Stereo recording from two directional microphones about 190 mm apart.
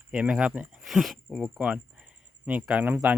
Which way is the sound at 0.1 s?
5° right (ahead or behind).